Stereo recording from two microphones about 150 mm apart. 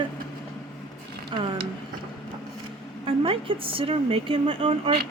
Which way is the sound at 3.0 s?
35° right (ahead or behind).